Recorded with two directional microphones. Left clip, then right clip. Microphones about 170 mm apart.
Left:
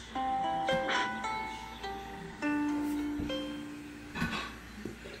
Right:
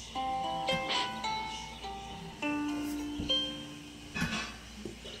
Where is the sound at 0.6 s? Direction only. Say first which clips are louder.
Left 2 dB; 50° left (ahead or behind).